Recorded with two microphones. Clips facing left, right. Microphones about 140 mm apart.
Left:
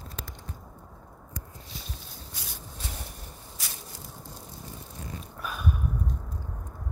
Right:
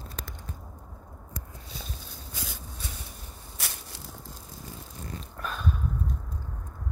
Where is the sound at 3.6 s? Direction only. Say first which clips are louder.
Right 4 dB; 60° right (ahead or behind).